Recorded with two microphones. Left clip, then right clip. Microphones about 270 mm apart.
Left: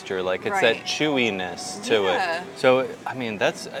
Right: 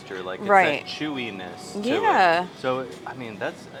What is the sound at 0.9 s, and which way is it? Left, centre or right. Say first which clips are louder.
Speech: left 8 dB; left.